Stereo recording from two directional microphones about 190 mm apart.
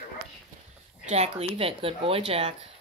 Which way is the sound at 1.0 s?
35° right (ahead or behind).